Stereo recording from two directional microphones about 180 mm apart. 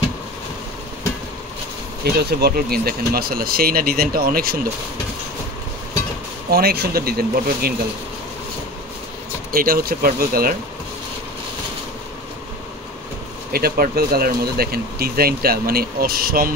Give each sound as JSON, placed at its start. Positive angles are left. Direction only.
{"t": 2.1, "sound": "speech", "side_deg": -60}
{"t": 6.5, "sound": "speech", "side_deg": -60}
{"t": 9.5, "sound": "speech", "side_deg": -55}
{"t": 13.5, "sound": "speech", "side_deg": -55}